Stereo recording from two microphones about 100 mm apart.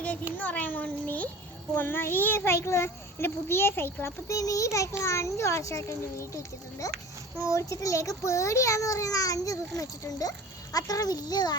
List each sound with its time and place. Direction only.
0.3 s a child's voice: 15° left (ahead or behind); by 11.5 s 40° left (ahead or behind)